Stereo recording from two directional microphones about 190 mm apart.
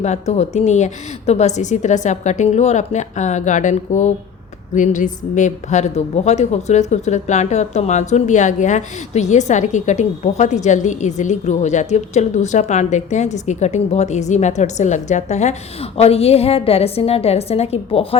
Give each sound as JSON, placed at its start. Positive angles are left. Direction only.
{"t": 0.0, "sound": "a woman's voice", "side_deg": 35}